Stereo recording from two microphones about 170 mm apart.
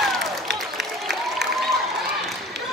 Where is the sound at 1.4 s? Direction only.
80° right.